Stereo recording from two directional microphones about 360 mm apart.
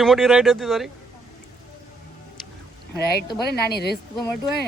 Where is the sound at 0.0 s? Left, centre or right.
Centre.